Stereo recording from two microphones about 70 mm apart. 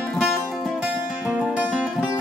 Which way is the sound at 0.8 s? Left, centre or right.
Centre.